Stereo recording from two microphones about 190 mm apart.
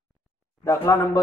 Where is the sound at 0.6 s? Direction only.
15° left (ahead or behind).